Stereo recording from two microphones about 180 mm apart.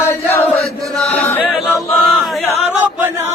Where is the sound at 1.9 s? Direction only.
Centre (ahead or behind).